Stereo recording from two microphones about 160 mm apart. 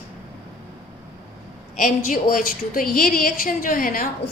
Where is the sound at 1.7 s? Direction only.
55° left (ahead or behind).